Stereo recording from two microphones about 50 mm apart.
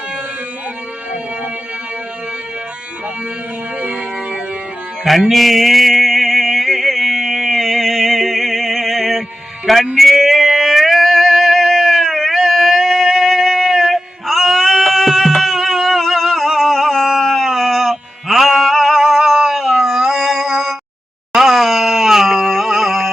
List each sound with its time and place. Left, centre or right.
3.8 s music: right
5.3 s a sound: centre
9.7 s speech: centre
10.0 s music: centre
21.3 s wail: centre